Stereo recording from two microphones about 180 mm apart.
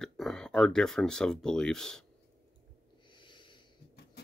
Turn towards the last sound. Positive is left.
turn(degrees=25)  # may be behind; listen again after turning